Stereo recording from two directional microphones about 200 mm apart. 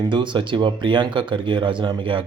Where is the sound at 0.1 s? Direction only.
25° right (ahead or behind).